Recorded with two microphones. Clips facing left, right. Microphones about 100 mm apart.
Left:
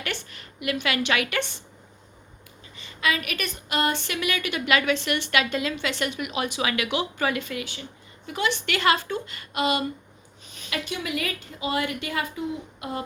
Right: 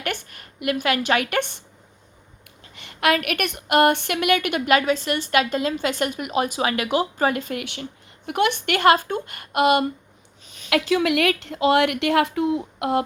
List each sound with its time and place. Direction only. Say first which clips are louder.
0.0 s a woman's voice: right 4 dB; 50° right (ahead or behind)
2.7 s a woman's voice: right 6 dB; 65° right (ahead or behind); by 7.6 s 45° right (ahead or behind)
7.6 s a woman's voice: right 4 dB; 60° right (ahead or behind)
10.7 s a woman's voice: right 10 dB; 85° right